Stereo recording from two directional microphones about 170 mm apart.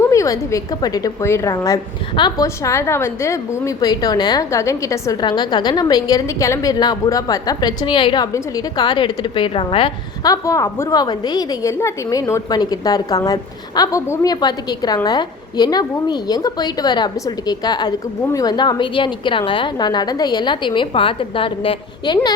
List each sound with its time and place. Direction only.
0.0 s a woman's voice: 20° left (ahead or behind)
10.3 s a woman's voice: 20° left (ahead or behind)